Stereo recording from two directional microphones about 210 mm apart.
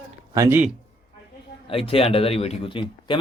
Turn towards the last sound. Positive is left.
turn(degrees=25)  # may be behind; listen again after turning